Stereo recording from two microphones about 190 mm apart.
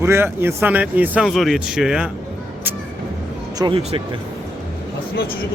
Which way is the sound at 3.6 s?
25° right (ahead or behind).